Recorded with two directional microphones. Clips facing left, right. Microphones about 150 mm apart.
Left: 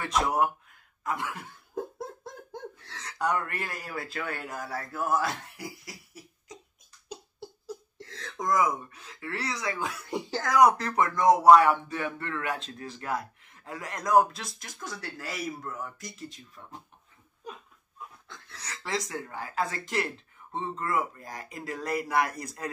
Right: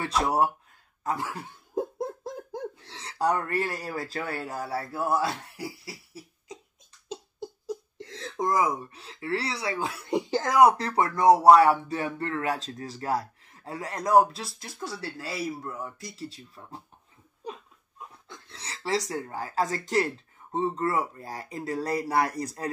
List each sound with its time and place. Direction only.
1.0 s speech: 35° right (ahead or behind)
2.9 s speech: 30° right (ahead or behind)
7.1 s giggle: 20° right (ahead or behind)
11.0 s speech: 30° right (ahead or behind)